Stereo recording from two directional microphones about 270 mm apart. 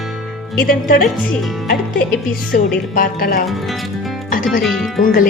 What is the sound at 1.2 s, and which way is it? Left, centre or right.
Speech, centre.